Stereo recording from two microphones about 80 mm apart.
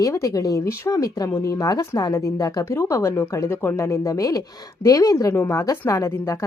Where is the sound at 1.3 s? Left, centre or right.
Left.